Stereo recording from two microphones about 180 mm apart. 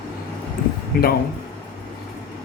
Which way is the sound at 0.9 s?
60° left (ahead or behind).